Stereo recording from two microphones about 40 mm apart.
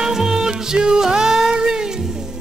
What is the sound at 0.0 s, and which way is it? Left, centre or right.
Music, centre.